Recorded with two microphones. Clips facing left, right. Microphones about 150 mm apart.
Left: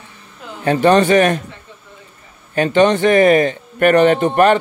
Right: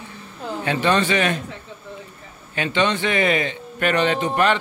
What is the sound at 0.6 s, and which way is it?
Speech, 45° left (ahead or behind).